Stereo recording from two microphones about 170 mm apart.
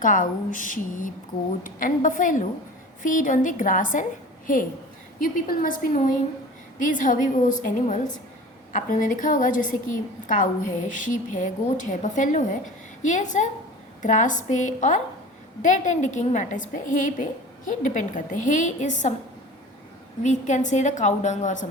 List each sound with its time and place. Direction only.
0.0 s a woman's voice: 50° left (ahead or behind)
20.2 s a woman's voice: 45° left (ahead or behind)